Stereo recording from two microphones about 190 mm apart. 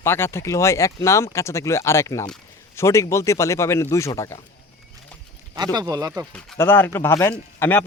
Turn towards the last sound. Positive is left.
turn(degrees=10)  # may be behind; listen again after turning